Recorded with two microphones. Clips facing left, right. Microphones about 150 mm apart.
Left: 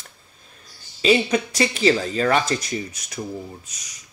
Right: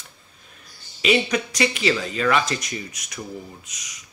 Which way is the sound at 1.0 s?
30° left (ahead or behind).